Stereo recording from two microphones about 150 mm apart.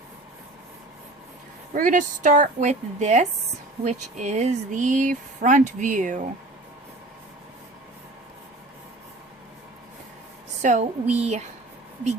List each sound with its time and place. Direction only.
1.7 s speech: 60° right (ahead or behind)
10.6 s speech: 55° right (ahead or behind)